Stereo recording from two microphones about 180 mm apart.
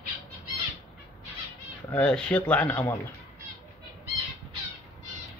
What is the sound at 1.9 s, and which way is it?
Speech, 5° left (ahead or behind).